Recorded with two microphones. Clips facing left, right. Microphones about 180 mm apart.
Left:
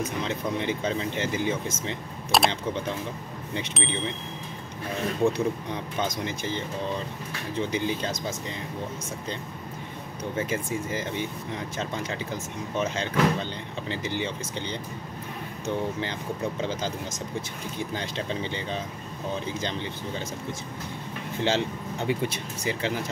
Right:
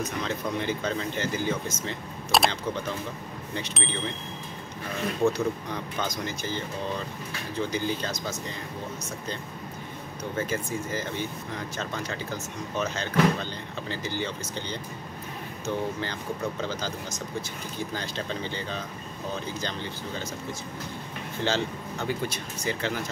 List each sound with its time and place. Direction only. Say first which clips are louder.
0.0 s speech: left 1 dB; 25° left (ahead or behind)
2.3 s speech: left 1 dB; centre (ahead or behind)
3.8 s speech: left 3 dB; centre (ahead or behind)
5.2 s speech: even; 30° left (ahead or behind)
10.3 s speech: left 1 dB; 25° left (ahead or behind)
21.5 s speech: left 2 dB; 25° left (ahead or behind)